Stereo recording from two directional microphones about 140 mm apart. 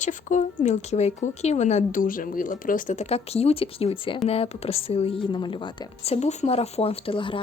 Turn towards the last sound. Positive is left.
turn(degrees=40)  # may be behind; listen again after turning